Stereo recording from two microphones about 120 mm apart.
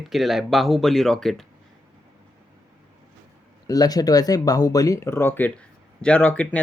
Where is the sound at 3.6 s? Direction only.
30° left (ahead or behind); by 6.6 s 15° left (ahead or behind).